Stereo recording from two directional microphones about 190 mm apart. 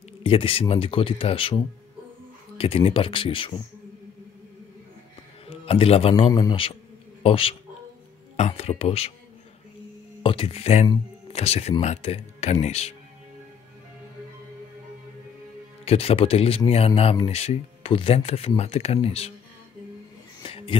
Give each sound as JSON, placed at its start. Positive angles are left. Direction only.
{"t": 0.2, "sound": "speech", "side_deg": 30}
{"t": 5.5, "sound": "speech", "side_deg": 30}
{"t": 10.2, "sound": "speech", "side_deg": 30}
{"t": 15.8, "sound": "speech", "side_deg": 30}
{"t": 20.4, "sound": "a sound", "side_deg": 30}